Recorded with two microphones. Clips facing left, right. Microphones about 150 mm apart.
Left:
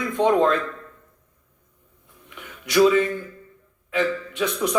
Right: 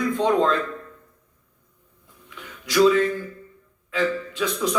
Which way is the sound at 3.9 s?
20° left (ahead or behind).